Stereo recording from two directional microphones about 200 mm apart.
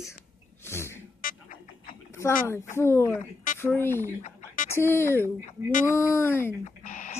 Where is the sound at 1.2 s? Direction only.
45° left (ahead or behind).